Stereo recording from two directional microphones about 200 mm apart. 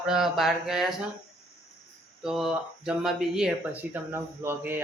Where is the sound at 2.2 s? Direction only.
Centre (ahead or behind).